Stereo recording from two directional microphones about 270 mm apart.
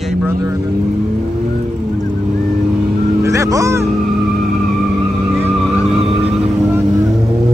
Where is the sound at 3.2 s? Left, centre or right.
Centre.